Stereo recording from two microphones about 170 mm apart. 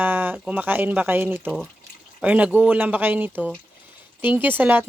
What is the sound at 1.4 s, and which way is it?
Speech, centre (ahead or behind).